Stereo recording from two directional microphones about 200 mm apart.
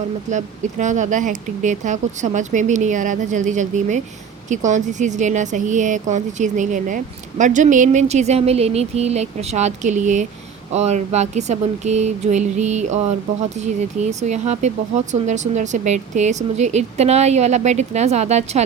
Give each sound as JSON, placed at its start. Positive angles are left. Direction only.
{"t": 0.3, "sound": "speech", "side_deg": -35}